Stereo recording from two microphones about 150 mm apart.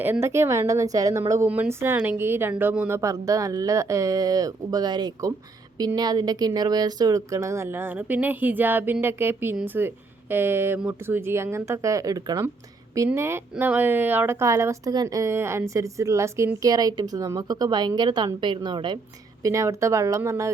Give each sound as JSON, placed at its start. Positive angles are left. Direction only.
{"t": 0.0, "sound": "speech", "side_deg": -15}